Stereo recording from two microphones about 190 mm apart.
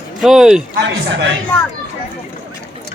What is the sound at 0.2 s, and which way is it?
Speech, centre (ahead or behind).